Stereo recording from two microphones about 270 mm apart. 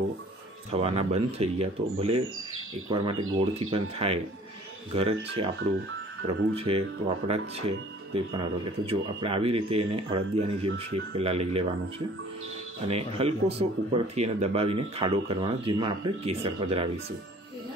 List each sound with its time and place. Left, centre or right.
0.7 s speech: right
4.9 s speech: right
12.8 s speech: right